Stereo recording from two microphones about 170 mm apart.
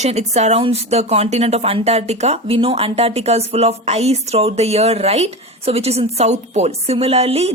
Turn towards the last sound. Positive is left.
turn(degrees=-35)  # may be behind; listen again after turning